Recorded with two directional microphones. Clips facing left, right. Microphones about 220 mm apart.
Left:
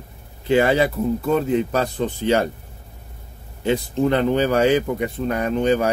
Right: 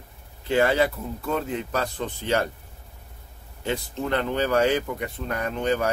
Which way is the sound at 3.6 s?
15° left (ahead or behind).